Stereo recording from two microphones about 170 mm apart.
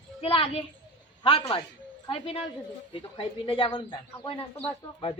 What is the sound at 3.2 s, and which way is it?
A woman's voice, 30° left (ahead or behind).